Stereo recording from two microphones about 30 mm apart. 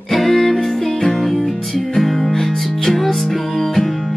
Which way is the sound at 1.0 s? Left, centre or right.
Left.